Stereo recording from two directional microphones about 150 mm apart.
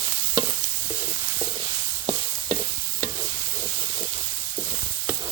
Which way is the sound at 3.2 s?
25° right (ahead or behind).